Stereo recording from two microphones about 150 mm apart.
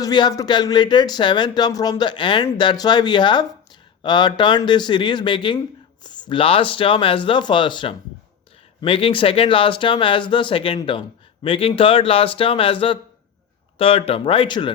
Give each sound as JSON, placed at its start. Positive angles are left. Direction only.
{"t": 0.0, "sound": "speech", "side_deg": 30}